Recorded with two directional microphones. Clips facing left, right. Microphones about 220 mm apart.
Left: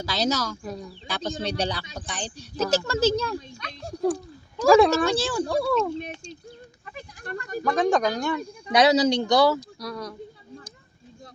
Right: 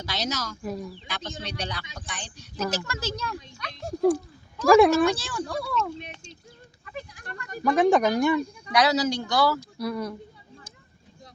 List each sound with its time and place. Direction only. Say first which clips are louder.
0.0 s speech: left 6 dB; 30° left (ahead or behind)
0.6 s speech: right 2 dB; centre (ahead or behind)
1.1 s speech: left 9 dB; 30° left (ahead or behind)
3.8 s speech: right 3 dB; centre (ahead or behind)
5.1 s speech: left 7 dB; 30° left (ahead or behind)
7.3 s a sound: left 7 dB; 40° left (ahead or behind)
7.9 s speech: right 3 dB; 15° right (ahead or behind)
8.7 s speech: left 4 dB; 20° left (ahead or behind)
9.7 s speech: right 4 dB; 10° right (ahead or behind)